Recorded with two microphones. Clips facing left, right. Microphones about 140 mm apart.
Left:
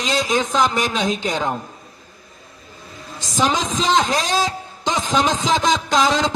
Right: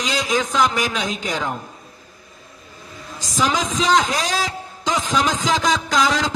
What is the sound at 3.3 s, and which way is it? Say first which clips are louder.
Speech: left 1 dB; 25° left (ahead or behind).